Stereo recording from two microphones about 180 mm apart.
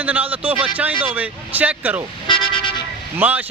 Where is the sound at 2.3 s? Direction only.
25° left (ahead or behind).